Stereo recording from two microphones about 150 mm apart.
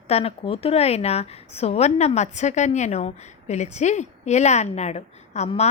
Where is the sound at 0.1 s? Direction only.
40° left (ahead or behind).